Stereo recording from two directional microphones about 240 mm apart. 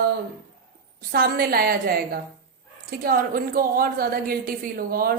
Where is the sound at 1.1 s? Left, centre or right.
Right.